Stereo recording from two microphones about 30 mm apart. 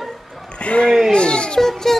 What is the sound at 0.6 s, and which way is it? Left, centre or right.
Speech, left.